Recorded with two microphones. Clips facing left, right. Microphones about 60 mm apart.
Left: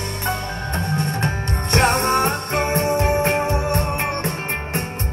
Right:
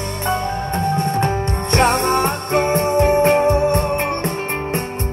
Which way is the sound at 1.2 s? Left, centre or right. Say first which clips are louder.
Right 4 dB; right.